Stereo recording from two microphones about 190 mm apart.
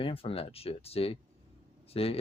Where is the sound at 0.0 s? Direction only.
30° left (ahead or behind).